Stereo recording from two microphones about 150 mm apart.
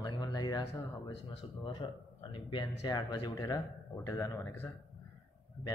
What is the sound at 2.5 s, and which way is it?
Speech, 30° left (ahead or behind).